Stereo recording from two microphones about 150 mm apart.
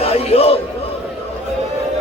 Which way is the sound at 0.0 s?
45° left (ahead or behind).